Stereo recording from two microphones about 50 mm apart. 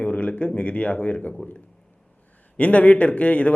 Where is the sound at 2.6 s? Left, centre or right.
Left.